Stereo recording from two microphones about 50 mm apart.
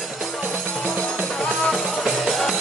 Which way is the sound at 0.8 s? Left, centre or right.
Centre.